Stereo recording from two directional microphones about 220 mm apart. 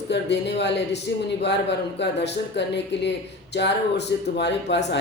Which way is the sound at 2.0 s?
50° left (ahead or behind).